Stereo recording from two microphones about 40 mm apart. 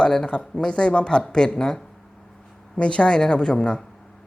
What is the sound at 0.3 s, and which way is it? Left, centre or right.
A woman's voice, left.